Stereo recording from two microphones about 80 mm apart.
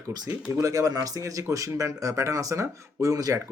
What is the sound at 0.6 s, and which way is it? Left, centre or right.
Speech, right.